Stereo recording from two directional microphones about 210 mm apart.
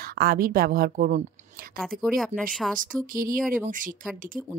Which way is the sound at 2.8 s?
40° right (ahead or behind).